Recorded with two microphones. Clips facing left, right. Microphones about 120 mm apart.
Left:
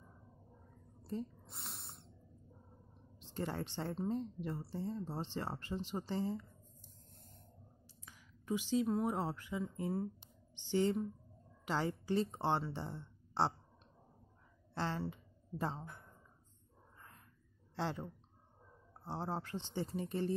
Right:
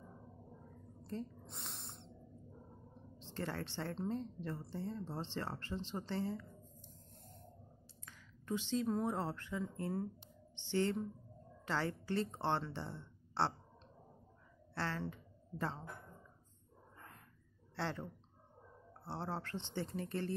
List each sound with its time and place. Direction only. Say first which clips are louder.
1.1 s a sound: left 2 dB; 5° left (ahead or behind)
3.2 s a woman's voice: left 2 dB; 15° left (ahead or behind)
8.0 s a woman's voice: even; 15° left (ahead or behind)
14.7 s speech: left 2 dB; 15° left (ahead or behind)
17.7 s a woman's voice: left 1 dB; 15° left (ahead or behind)